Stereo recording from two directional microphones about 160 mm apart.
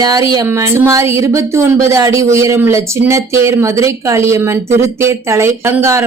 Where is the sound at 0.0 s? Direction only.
25° right (ahead or behind).